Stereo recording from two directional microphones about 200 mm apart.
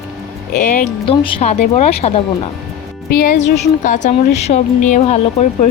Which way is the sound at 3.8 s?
35° left (ahead or behind).